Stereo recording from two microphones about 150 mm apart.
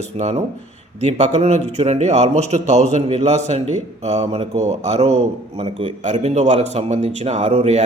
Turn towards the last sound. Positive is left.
turn(degrees=-50)  # may be behind; listen again after turning